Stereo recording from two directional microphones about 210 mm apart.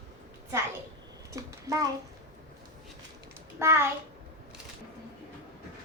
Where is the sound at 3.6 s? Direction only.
10° right (ahead or behind).